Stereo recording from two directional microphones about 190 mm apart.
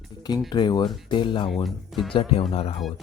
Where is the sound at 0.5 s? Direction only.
20° left (ahead or behind).